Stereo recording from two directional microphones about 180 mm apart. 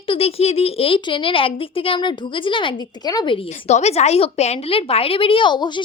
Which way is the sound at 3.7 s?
35° left (ahead or behind).